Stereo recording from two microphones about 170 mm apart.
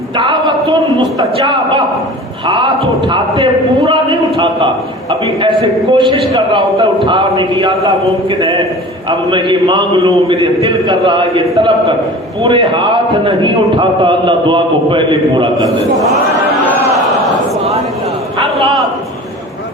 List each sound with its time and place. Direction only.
0.2 s a sound: 30° right (ahead or behind)
2.5 s a man's voice: 25° right (ahead or behind)
12.5 s a man's voice: 30° right (ahead or behind)